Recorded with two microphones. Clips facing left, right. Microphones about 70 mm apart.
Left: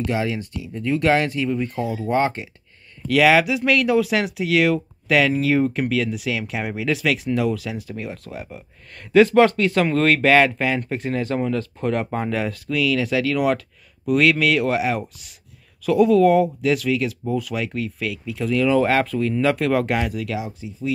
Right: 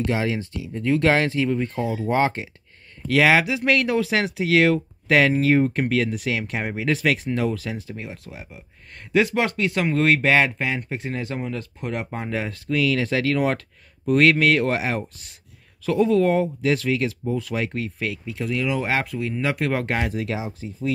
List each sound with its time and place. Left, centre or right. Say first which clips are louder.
0.2 s speech: even; right
3.1 s speech: left 2 dB; right
7.9 s speech: left 4 dB; right